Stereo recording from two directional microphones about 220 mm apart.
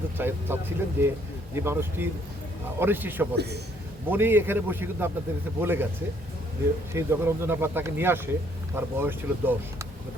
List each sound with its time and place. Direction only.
0.2 s speech: 10° right (ahead or behind)
3.3 s a man's voice: 50° right (ahead or behind)
4.1 s speech: 10° right (ahead or behind)
6.9 s speech: 10° right (ahead or behind)